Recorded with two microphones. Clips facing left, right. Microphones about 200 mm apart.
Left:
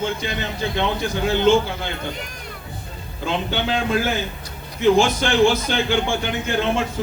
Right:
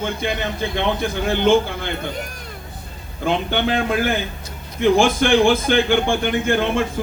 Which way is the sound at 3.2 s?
55° right (ahead or behind).